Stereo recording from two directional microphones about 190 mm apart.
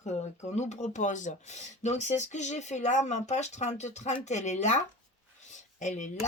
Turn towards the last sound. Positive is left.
turn(degrees=40)  # may be behind; listen again after turning